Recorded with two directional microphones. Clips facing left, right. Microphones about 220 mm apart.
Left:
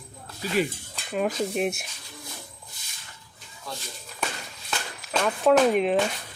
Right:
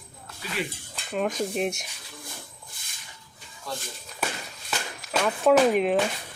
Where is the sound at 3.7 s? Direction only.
Centre (ahead or behind).